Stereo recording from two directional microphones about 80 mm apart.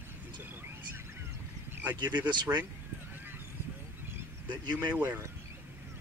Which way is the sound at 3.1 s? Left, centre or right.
Right.